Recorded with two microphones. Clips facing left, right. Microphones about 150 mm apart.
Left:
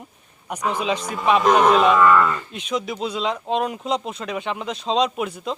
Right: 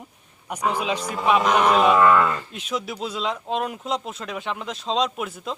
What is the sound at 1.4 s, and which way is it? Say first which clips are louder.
Cattle: left 4 dB; 40° left (ahead or behind).